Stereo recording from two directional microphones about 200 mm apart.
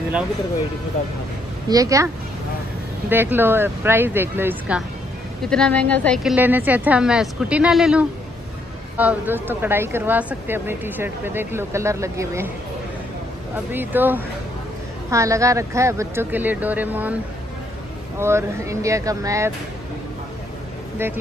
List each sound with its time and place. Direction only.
1.7 s speech: 15° right (ahead or behind)
3.1 s speech: 10° right (ahead or behind)
5.4 s speech: 5° left (ahead or behind)
6.3 s speech: 10° right (ahead or behind)
13.7 s speech: 10° right (ahead or behind)
18.2 s speech: 15° right (ahead or behind)
21.0 s speech: 10° right (ahead or behind)